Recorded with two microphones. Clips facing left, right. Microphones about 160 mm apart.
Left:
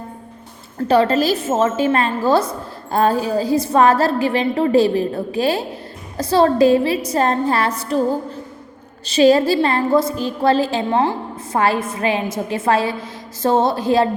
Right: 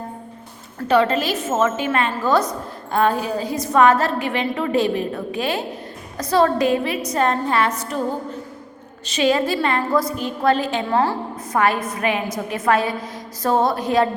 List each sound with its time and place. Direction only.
0.9 s a woman's voice: 35° left (ahead or behind)
9.0 s a woman's voice: 35° left (ahead or behind)